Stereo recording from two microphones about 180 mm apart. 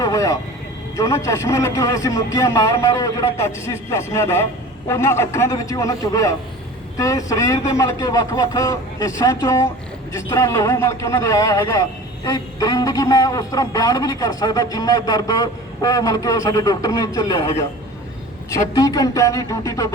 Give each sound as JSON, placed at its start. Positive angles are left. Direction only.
{"t": 0.0, "sound": "a man's voice", "side_deg": 15}
{"t": 18.5, "sound": "a man's voice", "side_deg": 20}